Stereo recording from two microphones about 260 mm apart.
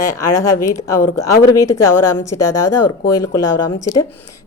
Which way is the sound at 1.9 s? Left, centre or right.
Left.